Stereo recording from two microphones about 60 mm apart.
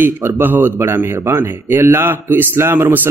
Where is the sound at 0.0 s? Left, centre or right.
Right.